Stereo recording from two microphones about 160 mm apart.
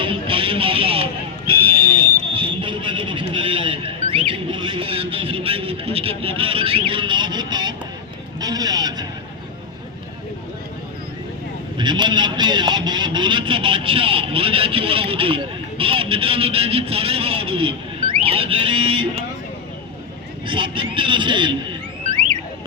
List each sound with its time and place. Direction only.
0.0 s a sound: 35° right (ahead or behind)
8.4 s vehicle: 25° right (ahead or behind)
11.8 s speech: 30° right (ahead or behind)
18.2 s sheep: 35° right (ahead or behind)
20.5 s speech: 30° right (ahead or behind)